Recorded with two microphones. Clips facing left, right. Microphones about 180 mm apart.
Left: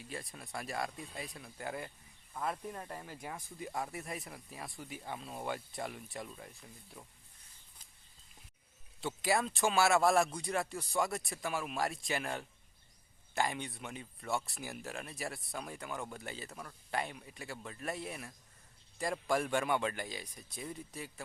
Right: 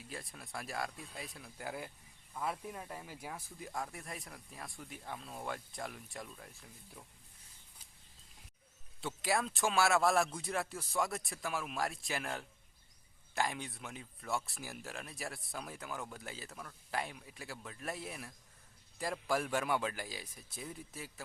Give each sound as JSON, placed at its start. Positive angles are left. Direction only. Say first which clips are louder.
{"t": 0.0, "sound": "speech", "louder": "left 2 dB", "side_deg": 0}
{"t": 9.0, "sound": "speech", "louder": "left 2 dB", "side_deg": 0}